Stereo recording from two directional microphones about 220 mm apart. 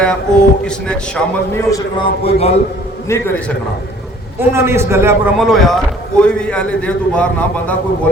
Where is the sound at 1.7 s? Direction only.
15° left (ahead or behind).